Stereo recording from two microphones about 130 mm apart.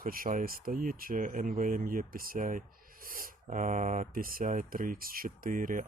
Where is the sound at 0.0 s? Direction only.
90° right.